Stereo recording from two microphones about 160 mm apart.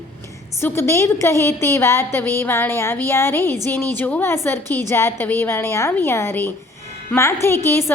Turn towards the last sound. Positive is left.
turn(degrees=15)  # may be behind; listen again after turning